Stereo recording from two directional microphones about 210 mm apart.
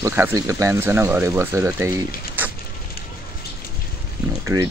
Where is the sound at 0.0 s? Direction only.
10° right (ahead or behind).